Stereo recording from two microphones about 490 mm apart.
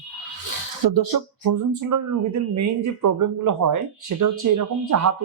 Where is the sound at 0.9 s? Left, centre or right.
Right.